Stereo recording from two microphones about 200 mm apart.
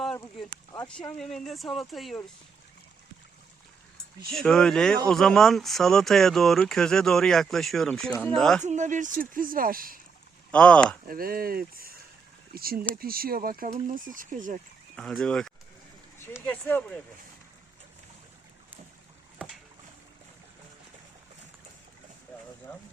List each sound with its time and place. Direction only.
0.0 s a sound: centre (ahead or behind)
1.1 s speech: centre (ahead or behind)
4.3 s speech: centre (ahead or behind)
8.6 s speech: 35° right (ahead or behind)
10.5 s speech: 5° left (ahead or behind)
11.1 s speech: 45° right (ahead or behind)
14.9 s speech: 5° left (ahead or behind)
22.7 s speech: 5° left (ahead or behind)